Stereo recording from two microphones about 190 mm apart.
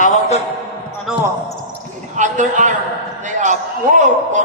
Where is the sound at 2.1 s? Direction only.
40° right (ahead or behind).